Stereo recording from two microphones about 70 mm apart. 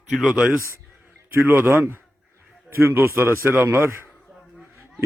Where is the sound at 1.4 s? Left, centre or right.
Right.